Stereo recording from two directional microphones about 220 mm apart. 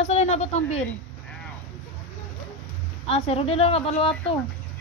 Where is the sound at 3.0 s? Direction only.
25° left (ahead or behind).